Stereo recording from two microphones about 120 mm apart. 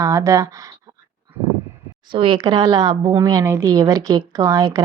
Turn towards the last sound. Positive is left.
turn(degrees=-30)  # may be behind; listen again after turning